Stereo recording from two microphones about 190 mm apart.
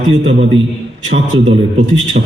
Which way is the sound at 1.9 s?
90° right.